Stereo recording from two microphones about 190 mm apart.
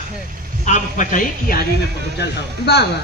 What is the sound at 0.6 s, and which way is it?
Speech, 40° left (ahead or behind).